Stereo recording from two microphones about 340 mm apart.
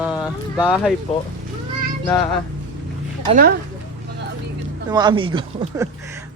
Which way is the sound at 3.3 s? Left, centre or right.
Right.